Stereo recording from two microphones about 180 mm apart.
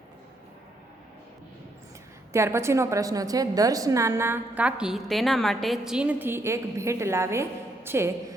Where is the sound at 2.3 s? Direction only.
15° right (ahead or behind).